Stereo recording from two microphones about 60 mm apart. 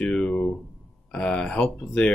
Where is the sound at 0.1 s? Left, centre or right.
Centre.